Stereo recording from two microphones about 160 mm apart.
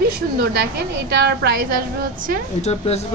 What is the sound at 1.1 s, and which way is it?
Speech, 90° right.